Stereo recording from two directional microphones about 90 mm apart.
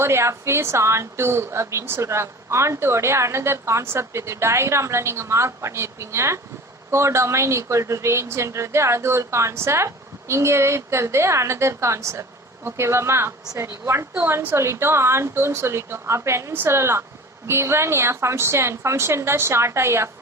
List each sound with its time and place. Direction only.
0.0 s a woman's voice: 30° right (ahead or behind)